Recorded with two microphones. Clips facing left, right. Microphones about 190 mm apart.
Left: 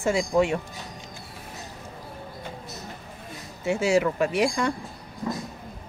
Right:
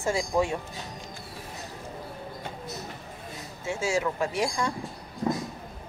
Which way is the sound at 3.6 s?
65° left (ahead or behind).